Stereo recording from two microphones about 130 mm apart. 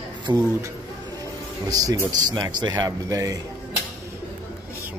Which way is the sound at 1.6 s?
30° right (ahead or behind).